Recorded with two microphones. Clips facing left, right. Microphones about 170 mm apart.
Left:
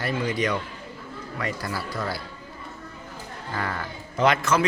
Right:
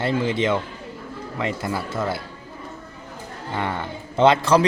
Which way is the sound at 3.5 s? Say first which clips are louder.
Right 4 dB; 25° right (ahead or behind).